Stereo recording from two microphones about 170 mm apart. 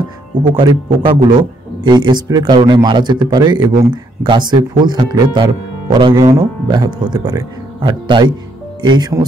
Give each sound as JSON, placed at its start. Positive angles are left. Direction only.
{"t": 0.4, "sound": "speech", "side_deg": -30}